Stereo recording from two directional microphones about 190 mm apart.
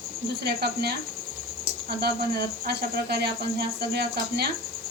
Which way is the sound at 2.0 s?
55° right (ahead or behind).